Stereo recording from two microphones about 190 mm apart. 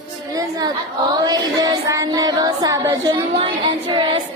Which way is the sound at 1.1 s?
20° right (ahead or behind).